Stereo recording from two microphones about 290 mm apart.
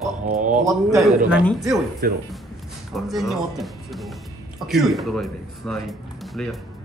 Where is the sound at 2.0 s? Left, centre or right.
Right.